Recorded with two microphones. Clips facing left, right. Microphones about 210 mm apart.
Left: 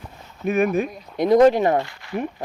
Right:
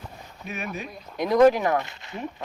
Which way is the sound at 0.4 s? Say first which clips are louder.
Left 14 dB; 50° left (ahead or behind).